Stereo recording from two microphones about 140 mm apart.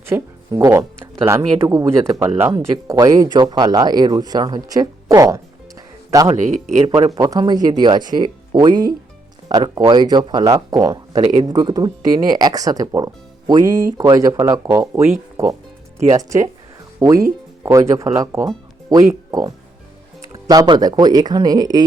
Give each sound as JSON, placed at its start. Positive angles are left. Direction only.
{"t": 0.0, "sound": "speech", "side_deg": -20}
{"t": 6.2, "sound": "speech", "side_deg": -55}
{"t": 6.8, "sound": "speech", "side_deg": -35}
{"t": 17.0, "sound": "speech", "side_deg": -25}